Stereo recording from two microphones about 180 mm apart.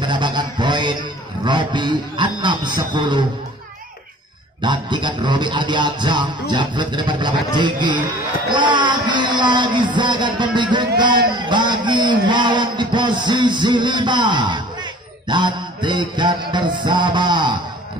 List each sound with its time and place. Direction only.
0.0 s mantra: 25° right (ahead or behind)
1.4 s a man's voice: 25° right (ahead or behind)
4.6 s a man's voice: 25° right (ahead or behind)